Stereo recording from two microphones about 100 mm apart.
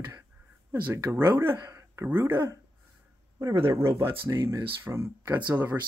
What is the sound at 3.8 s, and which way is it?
Speech, 30° right (ahead or behind).